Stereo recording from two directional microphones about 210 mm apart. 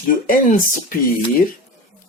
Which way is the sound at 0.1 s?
40° left (ahead or behind).